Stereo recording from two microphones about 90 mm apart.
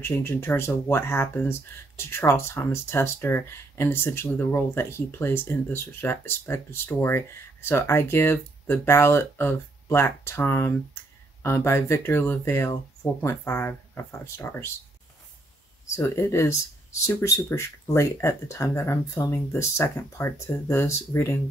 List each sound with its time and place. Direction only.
0.0 s speech: 30° left (ahead or behind)
16.0 s speech: 30° left (ahead or behind)